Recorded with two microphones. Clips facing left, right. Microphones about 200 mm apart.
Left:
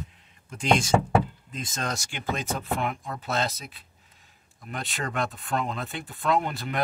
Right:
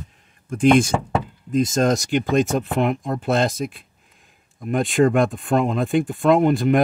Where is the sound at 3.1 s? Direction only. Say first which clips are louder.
Right 9 dB; 50° right (ahead or behind).